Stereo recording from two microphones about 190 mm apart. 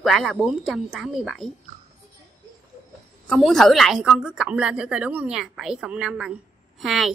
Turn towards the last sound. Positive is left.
turn(degrees=0)  # may be behind; listen again after turning